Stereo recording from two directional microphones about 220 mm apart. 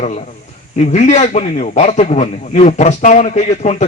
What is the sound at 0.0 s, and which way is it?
A man's voice, 30° left (ahead or behind).